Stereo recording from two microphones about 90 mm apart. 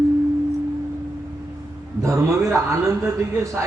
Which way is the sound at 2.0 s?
35° right (ahead or behind).